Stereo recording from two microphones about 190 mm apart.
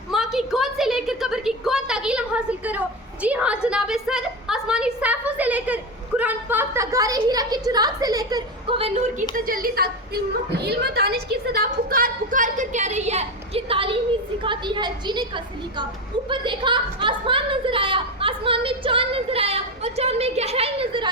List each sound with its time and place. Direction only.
0.1 s a woman's voice: centre (ahead or behind); by 8.9 s 25° right (ahead or behind)
9.3 s a woman's voice: 45° right (ahead or behind); by 15.2 s 25° right (ahead or behind)
16.3 s a woman's voice: 25° right (ahead or behind)